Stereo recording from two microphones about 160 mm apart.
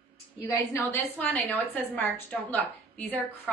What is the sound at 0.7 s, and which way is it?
A woman's voice, 10° left (ahead or behind).